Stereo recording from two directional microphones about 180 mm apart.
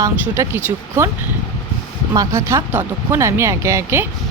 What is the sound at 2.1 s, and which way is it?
Speech, 15° right (ahead or behind).